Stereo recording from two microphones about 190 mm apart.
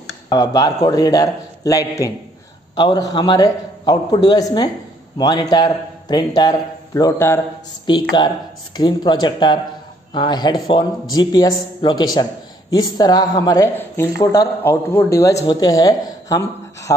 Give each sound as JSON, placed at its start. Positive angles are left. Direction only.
{"t": 0.3, "sound": "speech", "side_deg": 20}